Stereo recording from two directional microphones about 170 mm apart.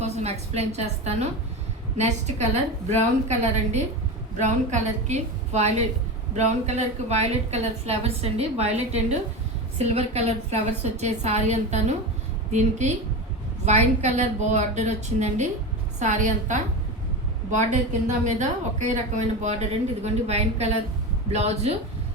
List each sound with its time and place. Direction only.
0.0 s a woman's voice: 40° right (ahead or behind)
18.3 s a woman's voice: 45° right (ahead or behind)